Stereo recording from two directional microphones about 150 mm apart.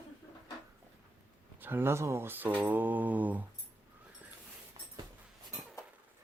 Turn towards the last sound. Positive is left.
turn(degrees=-30)  # may be behind; listen again after turning